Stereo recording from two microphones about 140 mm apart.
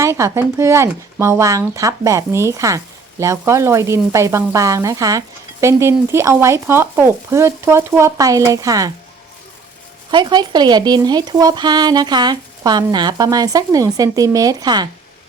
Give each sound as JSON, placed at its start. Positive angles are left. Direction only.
{"t": 0.0, "sound": "speech", "side_deg": -20}
{"t": 10.1, "sound": "speech", "side_deg": -35}